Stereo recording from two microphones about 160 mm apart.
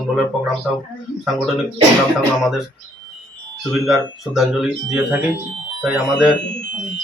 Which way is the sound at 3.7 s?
Centre (ahead or behind).